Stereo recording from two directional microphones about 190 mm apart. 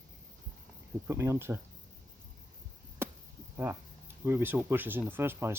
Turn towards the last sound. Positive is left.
turn(degrees=-10)  # may be behind; listen again after turning